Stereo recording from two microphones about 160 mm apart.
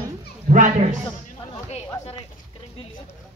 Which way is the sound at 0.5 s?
50° right (ahead or behind).